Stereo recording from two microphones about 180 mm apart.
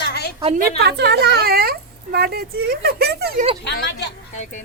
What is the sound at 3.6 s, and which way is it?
Speech, 65° left (ahead or behind).